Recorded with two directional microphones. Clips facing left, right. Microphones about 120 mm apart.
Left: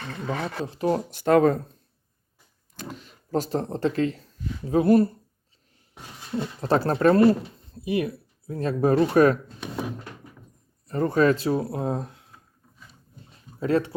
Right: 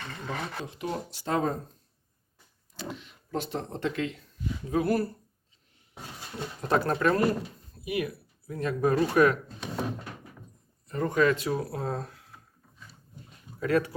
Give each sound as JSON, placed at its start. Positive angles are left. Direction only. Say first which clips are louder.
{"t": 0.3, "sound": "speech", "louder": "left 6 dB", "side_deg": 35}
{"t": 2.9, "sound": "speech", "louder": "left 7 dB", "side_deg": 40}
{"t": 4.7, "sound": "speech", "louder": "left 8 dB", "side_deg": 25}
{"t": 6.6, "sound": "speech", "louder": "left 4 dB", "side_deg": 30}
{"t": 10.8, "sound": "speech", "louder": "left 4 dB", "side_deg": 35}
{"t": 13.2, "sound": "a sound", "louder": "left 4 dB", "side_deg": 30}